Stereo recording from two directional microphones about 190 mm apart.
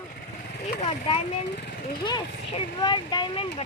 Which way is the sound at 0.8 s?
30° left (ahead or behind).